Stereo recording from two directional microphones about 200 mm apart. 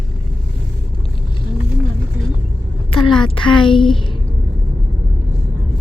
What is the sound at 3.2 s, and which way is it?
Speech, 25° left (ahead or behind).